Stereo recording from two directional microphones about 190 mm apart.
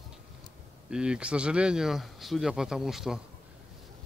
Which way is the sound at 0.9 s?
5° right (ahead or behind).